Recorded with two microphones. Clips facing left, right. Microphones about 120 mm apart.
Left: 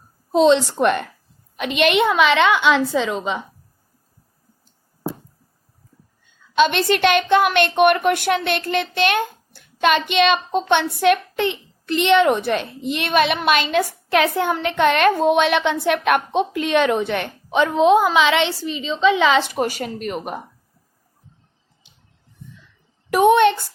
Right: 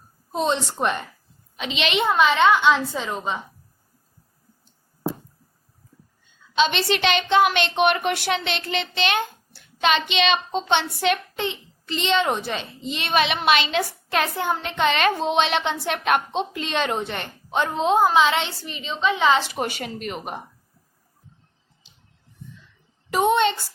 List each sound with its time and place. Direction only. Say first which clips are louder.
0.3 s a woman's voice: left 9 dB; 85° left; by 1.1 s 65° left (ahead or behind)
1.5 s a woman's voice: left 7 dB; 55° left (ahead or behind)
2.0 s a woman's voice: left 1 dB; 85° left
6.6 s a woman's voice: left 5 dB; 55° left (ahead or behind); by 18.5 s 75° left (ahead or behind)
19.0 s a woman's voice: left 4 dB; 90° left
19.4 s speech: left 5 dB; 45° left (ahead or behind)
23.0 s a woman's voice: left 6 dB; 60° left (ahead or behind)